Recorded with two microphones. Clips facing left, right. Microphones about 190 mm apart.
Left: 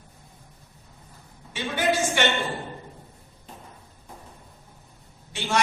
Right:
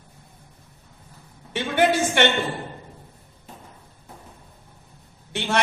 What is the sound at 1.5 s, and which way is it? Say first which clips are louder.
Speech: right 4 dB; 60° right (ahead or behind).